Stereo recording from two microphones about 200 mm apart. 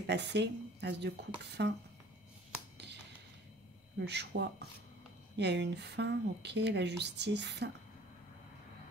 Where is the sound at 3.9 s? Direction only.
60° right (ahead or behind).